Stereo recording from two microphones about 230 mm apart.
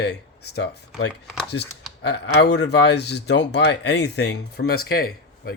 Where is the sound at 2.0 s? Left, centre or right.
Left.